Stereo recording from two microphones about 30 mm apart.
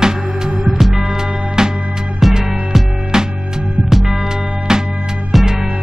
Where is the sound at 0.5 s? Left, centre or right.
Centre.